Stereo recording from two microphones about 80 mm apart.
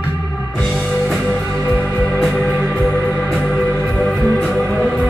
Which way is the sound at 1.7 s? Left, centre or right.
Centre.